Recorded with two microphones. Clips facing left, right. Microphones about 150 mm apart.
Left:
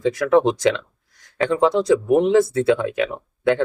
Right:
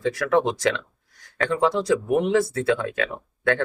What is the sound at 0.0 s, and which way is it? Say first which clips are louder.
Speech: left 5 dB; 20° left (ahead or behind).